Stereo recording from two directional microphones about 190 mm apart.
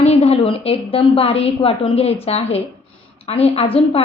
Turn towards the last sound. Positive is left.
turn(degrees=30)  # may be behind; listen again after turning